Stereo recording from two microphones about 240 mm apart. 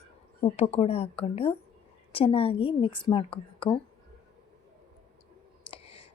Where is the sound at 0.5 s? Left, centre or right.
Left.